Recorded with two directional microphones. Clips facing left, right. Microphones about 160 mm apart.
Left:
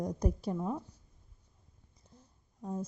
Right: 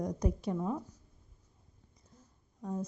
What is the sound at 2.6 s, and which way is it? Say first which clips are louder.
Speech: right 1 dB; 10° left (ahead or behind).